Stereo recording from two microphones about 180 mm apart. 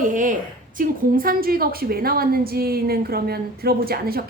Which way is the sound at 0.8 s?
50° right (ahead or behind).